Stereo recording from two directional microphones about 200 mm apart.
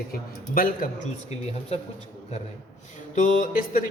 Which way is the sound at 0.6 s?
45° left (ahead or behind).